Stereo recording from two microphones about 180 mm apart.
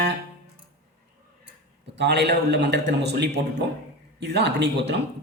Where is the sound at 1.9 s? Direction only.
70° right (ahead or behind).